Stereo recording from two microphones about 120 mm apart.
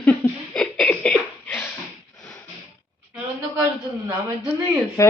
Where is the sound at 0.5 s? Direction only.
10° left (ahead or behind).